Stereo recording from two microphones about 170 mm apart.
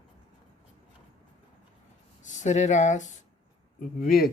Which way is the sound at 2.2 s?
45° left (ahead or behind).